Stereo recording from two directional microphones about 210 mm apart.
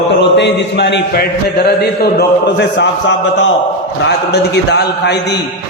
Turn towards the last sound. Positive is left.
turn(degrees=55)  # may be behind; listen again after turning